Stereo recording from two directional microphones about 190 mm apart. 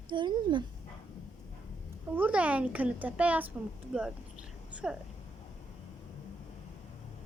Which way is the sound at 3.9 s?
5° right (ahead or behind).